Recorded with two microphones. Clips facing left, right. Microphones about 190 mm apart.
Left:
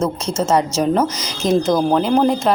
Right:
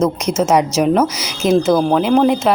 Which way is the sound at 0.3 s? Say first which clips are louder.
Right 1 dB; 10° right (ahead or behind).